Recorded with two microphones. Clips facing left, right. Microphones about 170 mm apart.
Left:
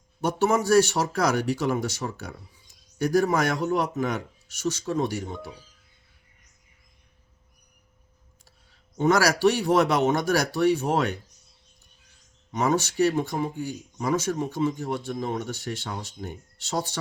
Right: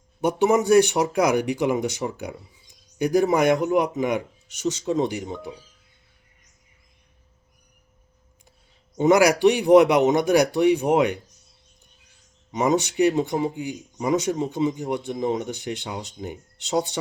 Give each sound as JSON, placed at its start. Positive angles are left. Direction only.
{"t": 0.2, "sound": "speech", "side_deg": -15}
{"t": 9.0, "sound": "speech", "side_deg": -15}
{"t": 12.5, "sound": "speech", "side_deg": -15}